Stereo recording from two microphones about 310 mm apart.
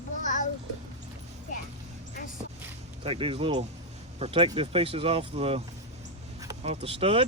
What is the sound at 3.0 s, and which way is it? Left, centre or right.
Speech, centre.